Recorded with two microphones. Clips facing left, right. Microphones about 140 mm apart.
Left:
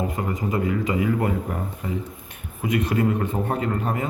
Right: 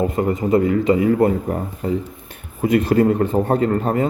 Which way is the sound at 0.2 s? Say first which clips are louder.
Right 8 dB; 35° right (ahead or behind).